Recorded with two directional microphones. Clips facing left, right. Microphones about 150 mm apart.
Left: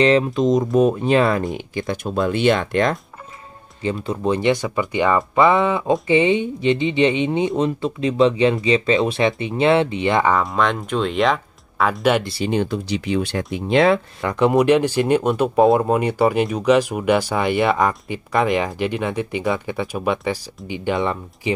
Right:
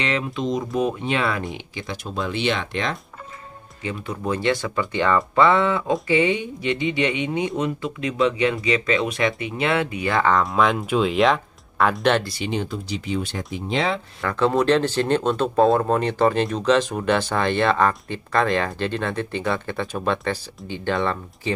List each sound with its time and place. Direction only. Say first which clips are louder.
0.0 s speech: left 9 dB; 40° left (ahead or behind)
1.5 s speech: left 7 dB; 50° left (ahead or behind)
3.8 s speech: left 6 dB; 30° left (ahead or behind)
10.3 s speech: even; centre (ahead or behind)
12.4 s speech: left 5 dB; 65° left (ahead or behind)
13.7 s speech: left 8 dB; 60° left (ahead or behind)
14.2 s speech: left 3 dB; 15° left (ahead or behind)